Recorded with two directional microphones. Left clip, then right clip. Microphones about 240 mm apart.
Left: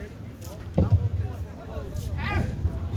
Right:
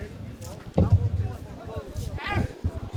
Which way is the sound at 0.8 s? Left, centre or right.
Right.